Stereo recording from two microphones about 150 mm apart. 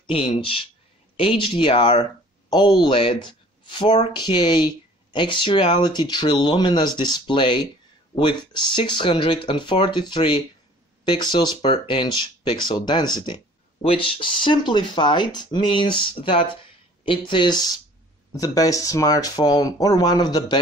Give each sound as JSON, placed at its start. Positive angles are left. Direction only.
{"t": 0.0, "sound": "speech", "side_deg": 35}